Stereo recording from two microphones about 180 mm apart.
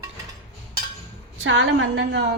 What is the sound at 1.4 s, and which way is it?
Speech, 85° right.